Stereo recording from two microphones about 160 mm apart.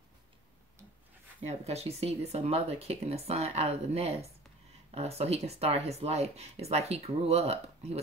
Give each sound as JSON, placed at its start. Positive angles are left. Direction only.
{"t": 1.5, "sound": "speech", "side_deg": -45}